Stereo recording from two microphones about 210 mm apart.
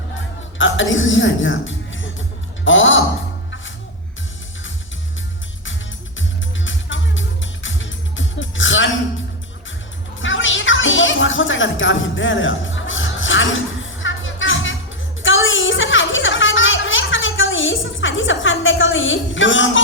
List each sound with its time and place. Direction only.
0.6 s a woman's voice: 65° left (ahead or behind)
6.7 s music: 65° left (ahead or behind)
10.2 s music: 65° left (ahead or behind)
15.2 s a sound: 65° left (ahead or behind)